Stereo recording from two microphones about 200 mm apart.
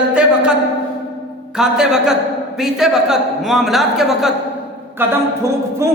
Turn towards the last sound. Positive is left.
turn(degrees=-15)  # may be behind; listen again after turning